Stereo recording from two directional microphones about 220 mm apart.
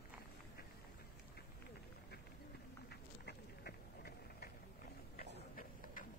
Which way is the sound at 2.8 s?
45° left (ahead or behind).